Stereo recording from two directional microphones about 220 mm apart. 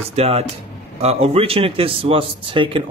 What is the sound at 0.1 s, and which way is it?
Speech, 30° right (ahead or behind).